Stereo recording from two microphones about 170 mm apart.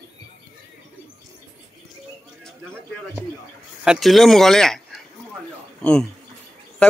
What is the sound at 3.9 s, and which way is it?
Speech, centre (ahead or behind).